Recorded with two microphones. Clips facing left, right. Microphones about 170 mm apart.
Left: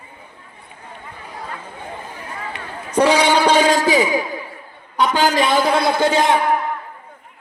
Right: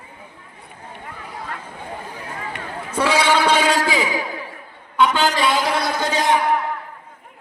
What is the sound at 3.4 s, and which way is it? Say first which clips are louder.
A man's voice: left 3 dB; 45° left (ahead or behind).